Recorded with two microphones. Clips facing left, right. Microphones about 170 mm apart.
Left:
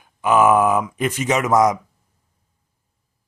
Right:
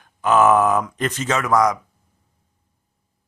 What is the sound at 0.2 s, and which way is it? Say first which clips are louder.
Speech: even; 10° left (ahead or behind).